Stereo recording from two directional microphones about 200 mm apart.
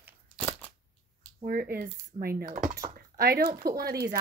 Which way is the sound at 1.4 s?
45° right (ahead or behind).